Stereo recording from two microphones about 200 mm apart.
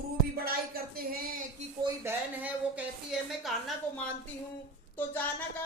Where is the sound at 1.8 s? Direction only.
10° right (ahead or behind).